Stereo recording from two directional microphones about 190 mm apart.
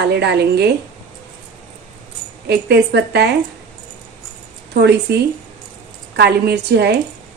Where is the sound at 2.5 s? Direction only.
60° right (ahead or behind).